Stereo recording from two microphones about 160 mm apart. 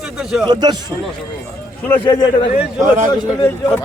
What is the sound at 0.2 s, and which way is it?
Speech, 5° right (ahead or behind).